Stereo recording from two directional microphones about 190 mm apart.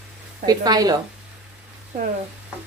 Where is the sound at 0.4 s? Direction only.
20° right (ahead or behind).